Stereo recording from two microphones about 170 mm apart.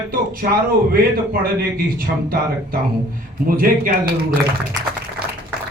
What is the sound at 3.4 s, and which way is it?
Speech, 55° right (ahead or behind).